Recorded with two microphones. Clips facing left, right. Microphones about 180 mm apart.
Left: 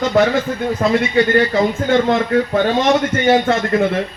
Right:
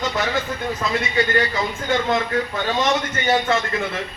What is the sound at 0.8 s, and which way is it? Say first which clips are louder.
A man's voice: left 8 dB; 55° left (ahead or behind).